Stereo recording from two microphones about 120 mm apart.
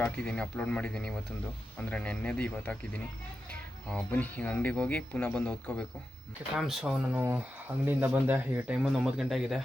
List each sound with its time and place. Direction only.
0.0 s speech: 10° left (ahead or behind)
6.6 s a man's voice: 5° right (ahead or behind)
7.2 s a man's voice: 15° right (ahead or behind)
8.8 s a man's voice: 5° right (ahead or behind)